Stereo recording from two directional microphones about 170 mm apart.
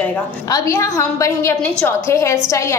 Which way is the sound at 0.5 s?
20° left (ahead or behind).